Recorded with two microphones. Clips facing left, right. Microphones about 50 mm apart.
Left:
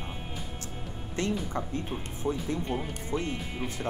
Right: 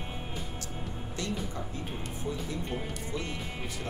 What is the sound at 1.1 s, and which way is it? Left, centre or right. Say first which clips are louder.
Speech: left 6 dB; left.